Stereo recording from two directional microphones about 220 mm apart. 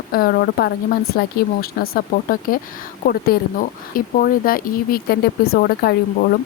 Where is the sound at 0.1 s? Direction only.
45° left (ahead or behind).